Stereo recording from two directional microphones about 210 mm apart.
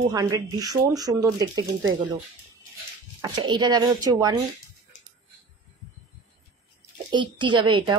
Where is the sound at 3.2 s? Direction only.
20° right (ahead or behind).